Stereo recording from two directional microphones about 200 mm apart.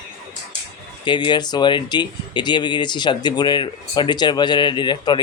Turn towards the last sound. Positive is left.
turn(degrees=20)  # may be behind; listen again after turning